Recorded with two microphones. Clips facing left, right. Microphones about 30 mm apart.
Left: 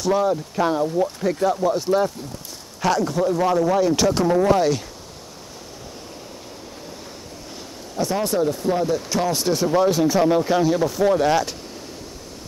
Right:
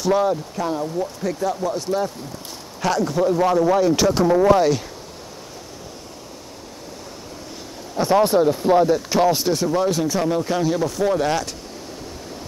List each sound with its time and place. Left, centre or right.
0.0 s speech: centre
0.6 s speech: centre
8.0 s speech: right
9.4 s speech: centre